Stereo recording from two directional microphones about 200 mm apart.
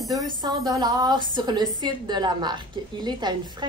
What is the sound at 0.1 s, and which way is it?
A woman's voice, 20° right (ahead or behind).